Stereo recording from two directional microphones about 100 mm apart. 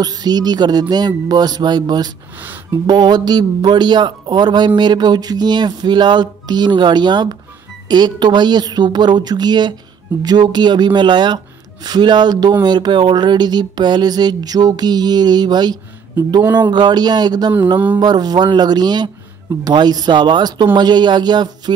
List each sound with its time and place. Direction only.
0.0 s a man's voice: 40° right (ahead or behind)